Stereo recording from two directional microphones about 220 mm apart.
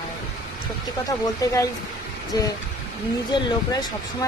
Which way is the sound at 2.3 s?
15° left (ahead or behind).